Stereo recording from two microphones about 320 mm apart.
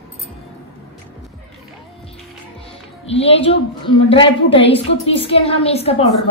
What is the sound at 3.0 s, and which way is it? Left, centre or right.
A woman's voice, centre.